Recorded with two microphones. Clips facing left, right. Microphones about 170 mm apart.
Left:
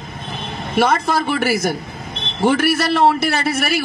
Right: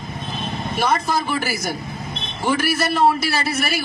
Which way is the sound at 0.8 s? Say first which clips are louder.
Left 5 dB; 65° left (ahead or behind).